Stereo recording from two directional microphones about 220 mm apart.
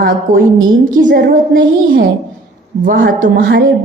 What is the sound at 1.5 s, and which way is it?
Speech, 60° right (ahead or behind).